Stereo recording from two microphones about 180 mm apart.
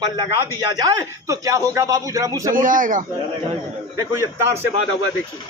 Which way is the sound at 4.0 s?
15° right (ahead or behind).